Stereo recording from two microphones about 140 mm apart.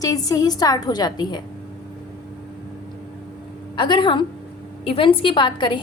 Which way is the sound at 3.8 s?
35° left (ahead or behind).